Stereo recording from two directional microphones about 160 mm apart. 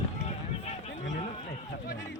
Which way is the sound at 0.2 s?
40° left (ahead or behind).